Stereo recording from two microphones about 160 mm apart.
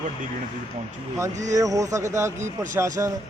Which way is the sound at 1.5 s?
20° right (ahead or behind).